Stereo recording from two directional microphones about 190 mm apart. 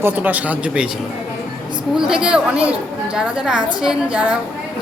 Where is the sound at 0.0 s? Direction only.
10° right (ahead or behind).